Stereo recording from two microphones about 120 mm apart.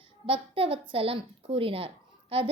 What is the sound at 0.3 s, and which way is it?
A woman's voice, 50° right (ahead or behind).